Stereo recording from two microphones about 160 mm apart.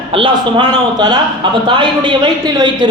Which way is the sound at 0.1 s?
30° right (ahead or behind).